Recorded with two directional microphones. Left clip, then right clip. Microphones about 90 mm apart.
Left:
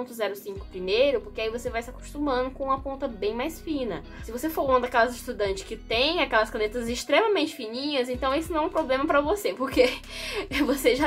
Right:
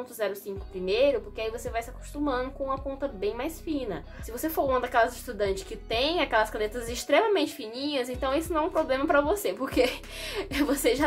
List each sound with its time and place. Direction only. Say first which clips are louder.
0.0 s a woman's voice: left 1 dB; 30° left (ahead or behind)